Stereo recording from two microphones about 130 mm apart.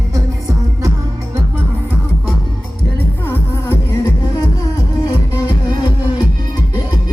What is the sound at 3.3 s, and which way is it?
Music, 20° left (ahead or behind).